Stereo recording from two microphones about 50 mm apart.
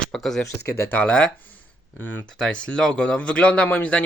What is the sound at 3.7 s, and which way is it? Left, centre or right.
Speech, left.